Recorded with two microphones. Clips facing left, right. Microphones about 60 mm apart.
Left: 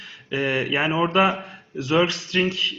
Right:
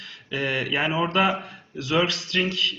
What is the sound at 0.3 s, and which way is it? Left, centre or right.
Speech, left.